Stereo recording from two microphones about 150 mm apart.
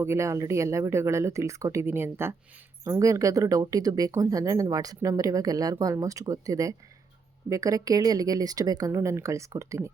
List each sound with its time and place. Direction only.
0.0 s speech: 20° right (ahead or behind)